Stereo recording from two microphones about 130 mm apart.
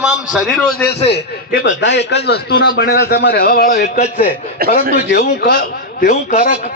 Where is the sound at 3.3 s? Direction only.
90° left; by 6.7 s 75° left (ahead or behind).